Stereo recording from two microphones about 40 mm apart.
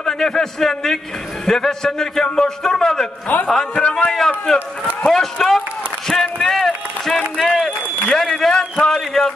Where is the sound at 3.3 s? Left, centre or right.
Left.